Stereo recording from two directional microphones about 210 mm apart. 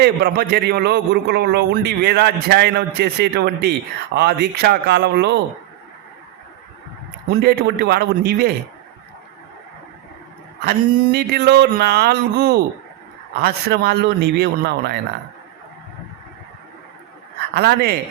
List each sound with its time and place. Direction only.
0.0 s a man's voice: 50° right (ahead or behind)
7.4 s a man's voice: 50° right (ahead or behind)
10.7 s a man's voice: 50° right (ahead or behind)
17.5 s a man's voice: 50° right (ahead or behind)